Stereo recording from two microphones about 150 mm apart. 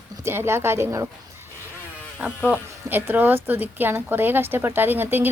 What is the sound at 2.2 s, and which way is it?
Speech, 10° right (ahead or behind).